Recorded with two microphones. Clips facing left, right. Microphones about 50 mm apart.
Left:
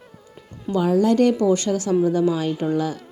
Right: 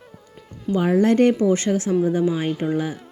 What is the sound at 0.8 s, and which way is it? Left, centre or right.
Speech, right.